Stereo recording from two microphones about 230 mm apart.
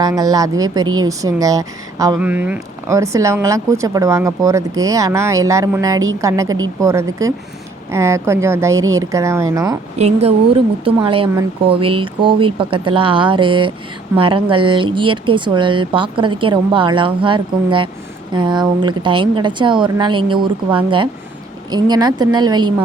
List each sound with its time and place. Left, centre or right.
0.0 s speech: centre
10.0 s speech: right